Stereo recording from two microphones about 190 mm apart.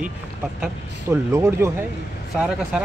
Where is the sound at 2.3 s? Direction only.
Centre (ahead or behind).